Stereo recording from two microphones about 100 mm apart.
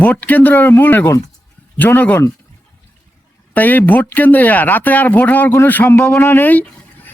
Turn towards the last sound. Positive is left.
turn(degrees=15)  # may be behind; listen again after turning